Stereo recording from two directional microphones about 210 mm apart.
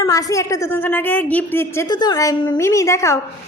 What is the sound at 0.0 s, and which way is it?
A woman's voice, 15° left (ahead or behind).